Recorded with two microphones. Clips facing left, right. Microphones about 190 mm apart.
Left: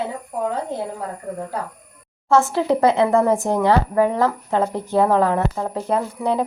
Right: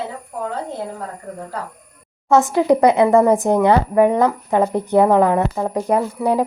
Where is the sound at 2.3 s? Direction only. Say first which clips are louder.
Right 3 dB; 15° right (ahead or behind).